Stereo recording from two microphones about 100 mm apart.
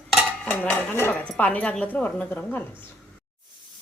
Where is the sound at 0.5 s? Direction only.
15° left (ahead or behind).